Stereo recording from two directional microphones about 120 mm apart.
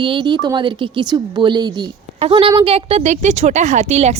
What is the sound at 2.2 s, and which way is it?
A woman's voice, 50° right (ahead or behind).